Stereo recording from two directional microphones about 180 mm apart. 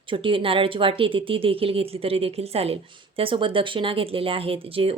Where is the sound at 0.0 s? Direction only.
30° right (ahead or behind).